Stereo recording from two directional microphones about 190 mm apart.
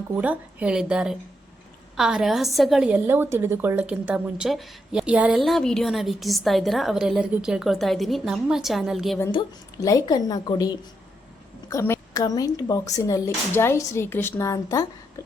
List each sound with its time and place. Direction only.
0.2 s a woman's voice: 5° right (ahead or behind)
9.8 s a woman's voice: 20° left (ahead or behind)